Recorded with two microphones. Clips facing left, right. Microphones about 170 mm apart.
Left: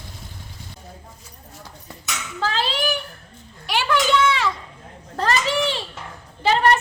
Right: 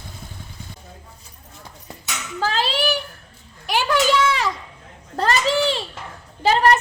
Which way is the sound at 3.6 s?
45° right (ahead or behind).